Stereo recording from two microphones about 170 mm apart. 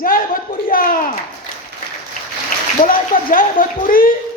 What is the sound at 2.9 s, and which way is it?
A man's voice, 55° left (ahead or behind).